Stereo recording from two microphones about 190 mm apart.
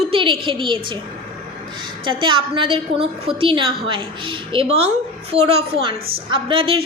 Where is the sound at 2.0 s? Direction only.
25° right (ahead or behind).